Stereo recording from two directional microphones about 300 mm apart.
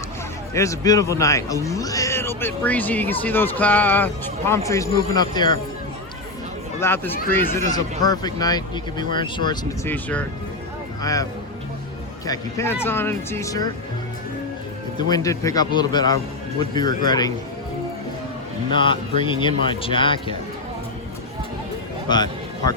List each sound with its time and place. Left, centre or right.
0.5 s speech: centre
6.7 s speech: centre
14.9 s speech: centre
19.2 s speech: centre
22.1 s a sound: centre